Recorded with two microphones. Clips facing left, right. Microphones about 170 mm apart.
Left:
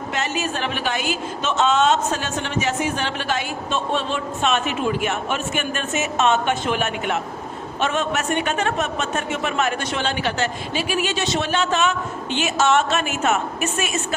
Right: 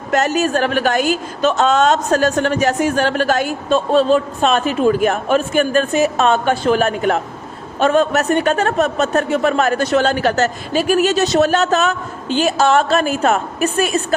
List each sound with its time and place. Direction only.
0.1 s a woman's voice: 40° right (ahead or behind)